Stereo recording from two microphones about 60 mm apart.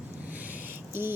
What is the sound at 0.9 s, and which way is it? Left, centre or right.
Speech, right.